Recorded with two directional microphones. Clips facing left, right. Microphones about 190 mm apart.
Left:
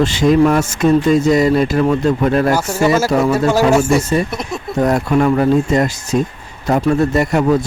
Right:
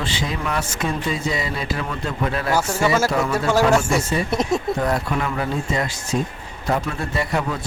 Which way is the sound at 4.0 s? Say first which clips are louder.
Left 4 dB; 40° left (ahead or behind).